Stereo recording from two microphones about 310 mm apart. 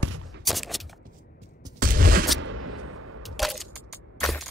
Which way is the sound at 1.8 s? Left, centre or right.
Right.